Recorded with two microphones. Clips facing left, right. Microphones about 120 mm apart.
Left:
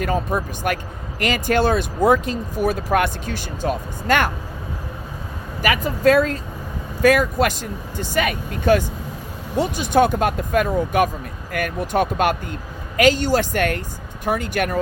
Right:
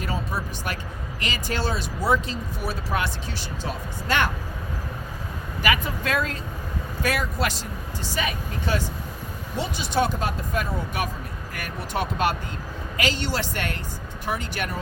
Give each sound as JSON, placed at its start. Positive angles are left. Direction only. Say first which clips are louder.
{"t": 0.0, "sound": "speech", "louder": "left 8 dB", "side_deg": 50}
{"t": 5.6, "sound": "speech", "louder": "left 8 dB", "side_deg": 40}